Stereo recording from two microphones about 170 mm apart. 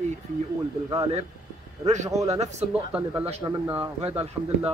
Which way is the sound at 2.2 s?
40° right (ahead or behind).